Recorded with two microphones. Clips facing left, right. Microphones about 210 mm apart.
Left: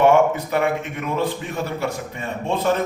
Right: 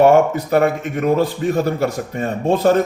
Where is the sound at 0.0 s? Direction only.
40° right (ahead or behind).